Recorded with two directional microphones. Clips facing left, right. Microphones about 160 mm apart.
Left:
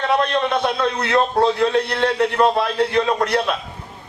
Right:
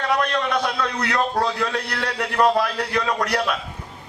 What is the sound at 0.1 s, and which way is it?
A man's voice, 25° left (ahead or behind).